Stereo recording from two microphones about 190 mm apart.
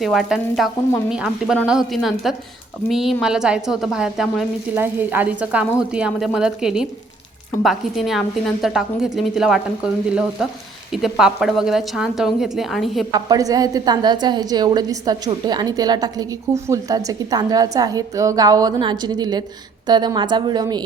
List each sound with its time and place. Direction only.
0.0 s a woman's voice: centre (ahead or behind)
13.1 s a woman's voice: 20° right (ahead or behind)